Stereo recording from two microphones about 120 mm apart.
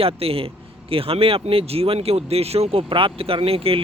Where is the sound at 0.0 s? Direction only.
55° right (ahead or behind).